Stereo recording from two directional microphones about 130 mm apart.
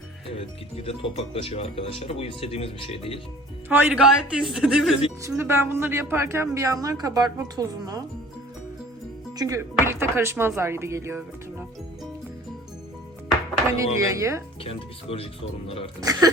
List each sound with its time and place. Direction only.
0.3 s speech: 45° left (ahead or behind)
3.7 s a man's voice: 5° right (ahead or behind)
5.2 s a woman's voice: 20° right (ahead or behind)
9.4 s a woman's voice: 20° right (ahead or behind)
13.7 s a woman's voice: 25° right (ahead or behind)
14.6 s speech: 45° left (ahead or behind)
16.0 s a woman's voice: 30° right (ahead or behind)